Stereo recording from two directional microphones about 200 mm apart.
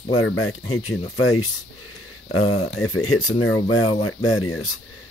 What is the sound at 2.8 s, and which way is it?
Speech, 90° left.